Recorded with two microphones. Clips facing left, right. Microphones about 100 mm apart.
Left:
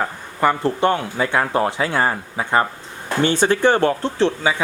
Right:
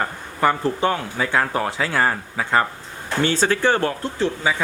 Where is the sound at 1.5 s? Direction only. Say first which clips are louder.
Left 3 dB; 20° left (ahead or behind).